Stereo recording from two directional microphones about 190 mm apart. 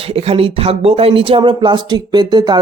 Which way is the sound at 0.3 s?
30° right (ahead or behind).